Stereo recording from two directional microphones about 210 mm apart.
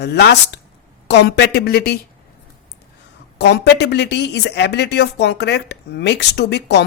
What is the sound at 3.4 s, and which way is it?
Speech, 55° left (ahead or behind).